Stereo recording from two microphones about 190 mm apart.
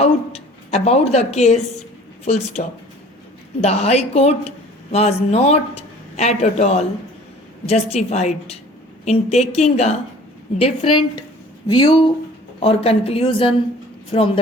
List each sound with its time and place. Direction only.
0.0 s a woman's voice: 35° left (ahead or behind)